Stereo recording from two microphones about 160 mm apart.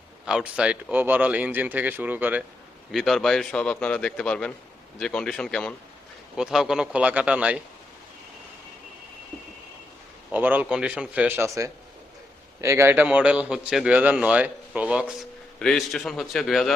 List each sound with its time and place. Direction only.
0.3 s a man's voice: 5° right (ahead or behind)
2.9 s a man's voice: centre (ahead or behind)
10.3 s a man's voice: 10° right (ahead or behind)
15.5 s a man's voice: 5° left (ahead or behind)